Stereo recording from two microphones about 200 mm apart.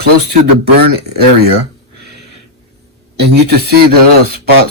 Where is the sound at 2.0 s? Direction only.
55° right (ahead or behind).